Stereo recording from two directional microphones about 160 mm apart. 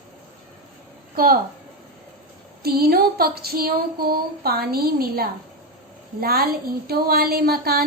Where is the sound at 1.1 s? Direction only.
65° right (ahead or behind).